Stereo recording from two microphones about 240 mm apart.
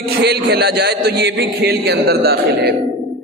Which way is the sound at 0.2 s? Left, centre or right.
Right.